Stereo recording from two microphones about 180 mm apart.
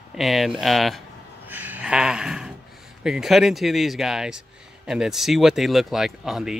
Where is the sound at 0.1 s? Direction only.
Centre (ahead or behind).